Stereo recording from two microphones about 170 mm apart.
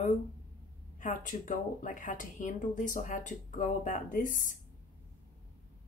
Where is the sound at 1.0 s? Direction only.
50° left (ahead or behind).